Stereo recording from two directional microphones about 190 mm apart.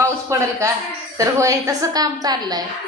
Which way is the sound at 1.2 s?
15° right (ahead or behind).